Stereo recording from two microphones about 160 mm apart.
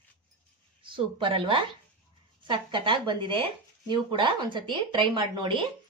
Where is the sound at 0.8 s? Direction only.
30° right (ahead or behind).